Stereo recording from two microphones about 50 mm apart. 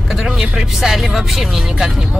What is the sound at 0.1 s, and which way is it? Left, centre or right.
Speech, centre.